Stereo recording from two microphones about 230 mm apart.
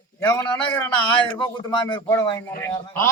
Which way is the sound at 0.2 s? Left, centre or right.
Centre.